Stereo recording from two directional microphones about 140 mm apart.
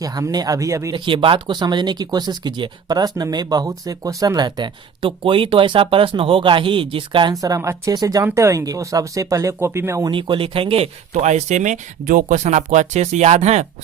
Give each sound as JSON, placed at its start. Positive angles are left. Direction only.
{"t": 0.0, "sound": "speech", "side_deg": -25}
{"t": 0.9, "sound": "speech", "side_deg": -35}
{"t": 10.1, "sound": "speech", "side_deg": -35}
{"t": 11.1, "sound": "speech", "side_deg": -55}